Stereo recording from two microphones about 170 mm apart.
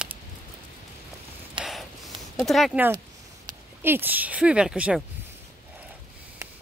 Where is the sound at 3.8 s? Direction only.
10° right (ahead or behind).